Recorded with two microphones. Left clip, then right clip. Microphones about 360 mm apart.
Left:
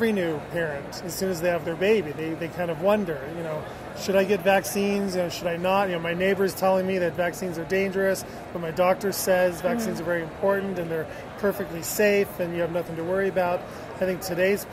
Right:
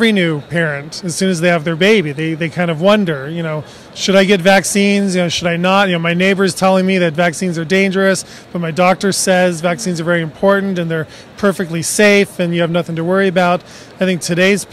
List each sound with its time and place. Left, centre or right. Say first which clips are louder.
0.0 s speech: right 11 dB; right
12.0 s speech: right 11 dB; right